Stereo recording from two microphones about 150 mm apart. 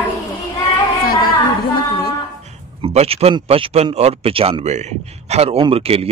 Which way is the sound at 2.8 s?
45° right (ahead or behind).